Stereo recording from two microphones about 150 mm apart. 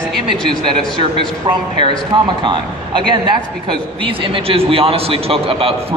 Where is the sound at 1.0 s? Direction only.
30° right (ahead or behind).